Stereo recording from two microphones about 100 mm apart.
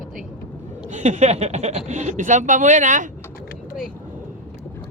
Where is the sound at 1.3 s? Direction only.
90° right.